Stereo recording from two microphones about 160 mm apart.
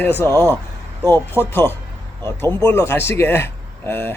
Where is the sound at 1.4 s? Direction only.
15° left (ahead or behind).